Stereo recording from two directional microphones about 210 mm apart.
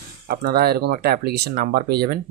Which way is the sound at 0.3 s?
45° right (ahead or behind).